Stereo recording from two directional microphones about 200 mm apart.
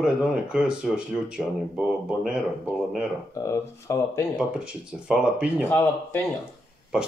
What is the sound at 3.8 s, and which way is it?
Speech, 15° left (ahead or behind).